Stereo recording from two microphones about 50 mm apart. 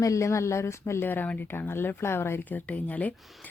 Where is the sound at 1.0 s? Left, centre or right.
Left.